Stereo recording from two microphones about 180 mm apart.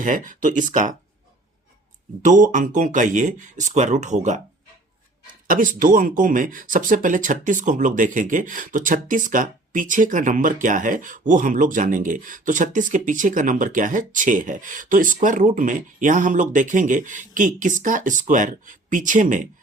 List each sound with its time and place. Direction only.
0.0 s speech: 45° right (ahead or behind)
2.2 s speech: 45° right (ahead or behind)
5.5 s speech: 50° right (ahead or behind)